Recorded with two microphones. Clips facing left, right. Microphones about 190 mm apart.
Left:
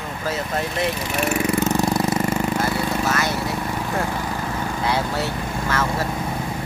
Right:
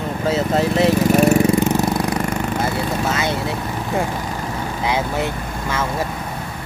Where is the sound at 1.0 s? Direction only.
40° right (ahead or behind).